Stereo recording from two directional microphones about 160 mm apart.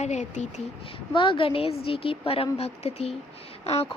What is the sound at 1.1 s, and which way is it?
A woman's voice, 35° left (ahead or behind).